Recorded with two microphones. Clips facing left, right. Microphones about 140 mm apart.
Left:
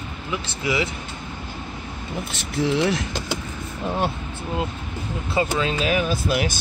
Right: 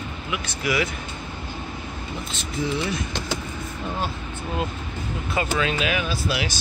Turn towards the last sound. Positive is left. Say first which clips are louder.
# left 4 dB
turn(degrees=50)  # may be behind; listen again after turning